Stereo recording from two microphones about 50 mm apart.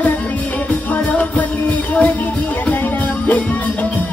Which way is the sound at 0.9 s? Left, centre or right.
Left.